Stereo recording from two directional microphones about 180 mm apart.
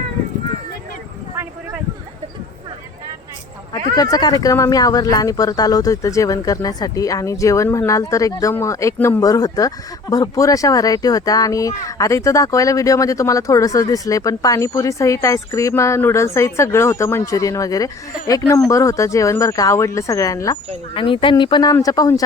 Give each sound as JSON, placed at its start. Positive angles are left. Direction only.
{"t": 3.7, "sound": "speech", "side_deg": 20}
{"t": 20.9, "sound": "speech", "side_deg": 30}